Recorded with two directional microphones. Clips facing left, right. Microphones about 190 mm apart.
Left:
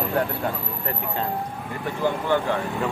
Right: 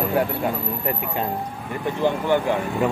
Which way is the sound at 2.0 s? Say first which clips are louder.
Right 2 dB; 15° right (ahead or behind).